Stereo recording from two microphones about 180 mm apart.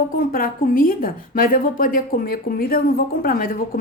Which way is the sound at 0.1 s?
55° left (ahead or behind).